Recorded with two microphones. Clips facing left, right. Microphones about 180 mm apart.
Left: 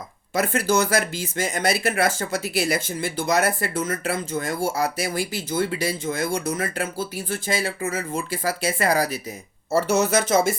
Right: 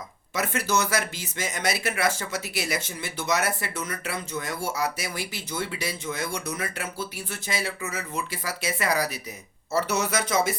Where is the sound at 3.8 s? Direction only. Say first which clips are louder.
Left 7 dB; 45° left (ahead or behind).